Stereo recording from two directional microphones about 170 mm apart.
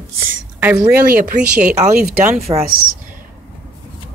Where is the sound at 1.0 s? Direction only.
60° right (ahead or behind).